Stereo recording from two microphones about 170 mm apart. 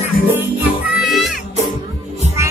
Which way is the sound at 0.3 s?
10° right (ahead or behind).